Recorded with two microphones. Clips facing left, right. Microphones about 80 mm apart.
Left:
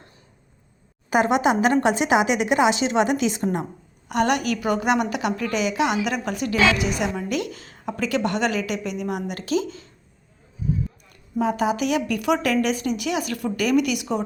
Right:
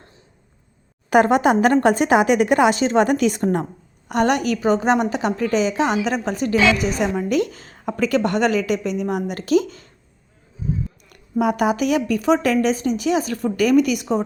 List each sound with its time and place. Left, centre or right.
1.1 s a woman's voice: right
4.1 s a woman's voice: right
11.1 s a woman's voice: right
12.1 s a woman's voice: right
13.6 s a woman's voice: right